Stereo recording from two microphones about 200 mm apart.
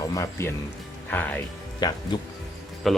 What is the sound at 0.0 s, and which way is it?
Speech, 15° left (ahead or behind).